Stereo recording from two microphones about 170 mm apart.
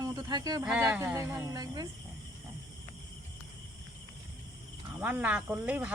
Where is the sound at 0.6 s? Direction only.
10° right (ahead or behind).